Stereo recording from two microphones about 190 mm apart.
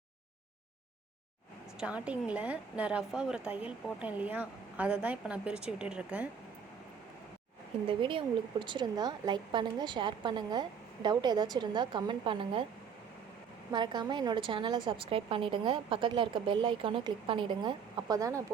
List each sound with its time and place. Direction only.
1.8 s a woman's voice: 5° right (ahead or behind)
7.9 s a woman's voice: 25° right (ahead or behind)
13.7 s a woman's voice: 20° right (ahead or behind)